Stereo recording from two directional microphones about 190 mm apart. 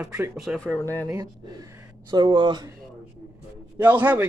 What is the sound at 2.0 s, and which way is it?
Speech, 25° right (ahead or behind).